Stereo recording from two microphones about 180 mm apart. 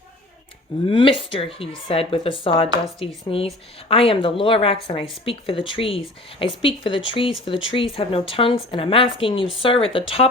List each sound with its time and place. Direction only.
0.9 s speech: 30° left (ahead or behind)